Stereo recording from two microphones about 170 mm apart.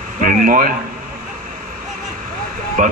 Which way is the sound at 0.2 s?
55° right (ahead or behind).